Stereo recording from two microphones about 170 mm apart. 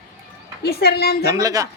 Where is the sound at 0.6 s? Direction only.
70° left (ahead or behind).